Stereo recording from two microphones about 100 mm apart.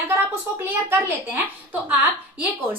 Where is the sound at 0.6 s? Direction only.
20° right (ahead or behind).